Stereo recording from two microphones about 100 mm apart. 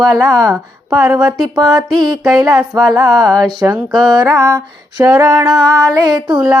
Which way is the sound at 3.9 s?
45° right (ahead or behind).